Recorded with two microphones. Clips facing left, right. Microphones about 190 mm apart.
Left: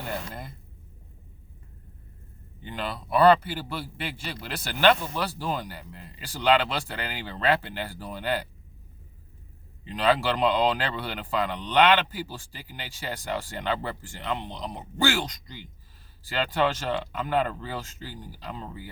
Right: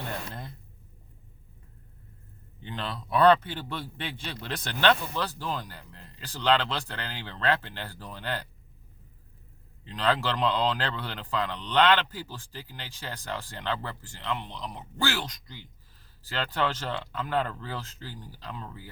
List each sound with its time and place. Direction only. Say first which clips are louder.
2.6 s a man's voice: left 2 dB; 10° left (ahead or behind)
9.8 s a man's voice: left 4 dB; 15° left (ahead or behind)